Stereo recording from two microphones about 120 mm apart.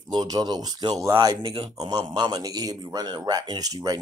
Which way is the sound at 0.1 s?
35° right (ahead or behind).